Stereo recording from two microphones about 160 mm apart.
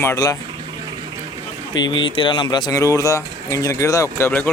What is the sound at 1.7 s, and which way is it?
Speech, 30° left (ahead or behind).